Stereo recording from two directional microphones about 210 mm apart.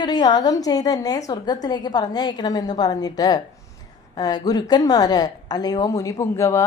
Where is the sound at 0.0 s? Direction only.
20° left (ahead or behind).